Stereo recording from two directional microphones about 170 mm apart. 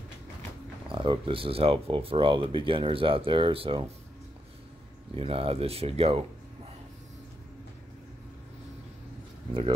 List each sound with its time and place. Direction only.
0.8 s speech: 30° right (ahead or behind)
5.1 s speech: 35° right (ahead or behind)
9.5 s speech: 30° right (ahead or behind)